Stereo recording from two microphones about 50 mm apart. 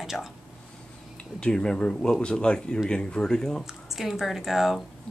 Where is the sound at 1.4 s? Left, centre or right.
Centre.